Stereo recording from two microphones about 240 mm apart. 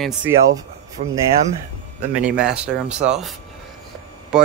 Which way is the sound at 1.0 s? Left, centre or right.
Right.